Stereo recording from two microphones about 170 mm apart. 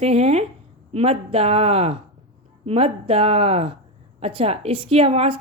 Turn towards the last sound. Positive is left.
turn(degrees=-35)  # may be behind; listen again after turning